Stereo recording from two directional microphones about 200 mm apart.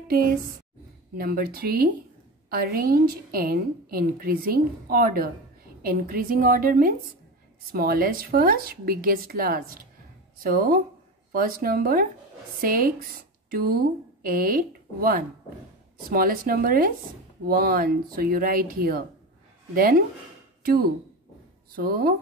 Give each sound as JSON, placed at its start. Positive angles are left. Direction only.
{"t": 1.1, "sound": "a woman's voice", "side_deg": -45}
{"t": 21.7, "sound": "a woman's voice", "side_deg": -50}